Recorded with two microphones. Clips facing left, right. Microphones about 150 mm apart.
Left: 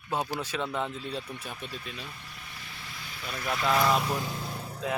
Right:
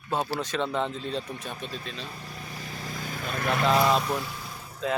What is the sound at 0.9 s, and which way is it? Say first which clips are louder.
Speech: right 4 dB; 35° right (ahead or behind).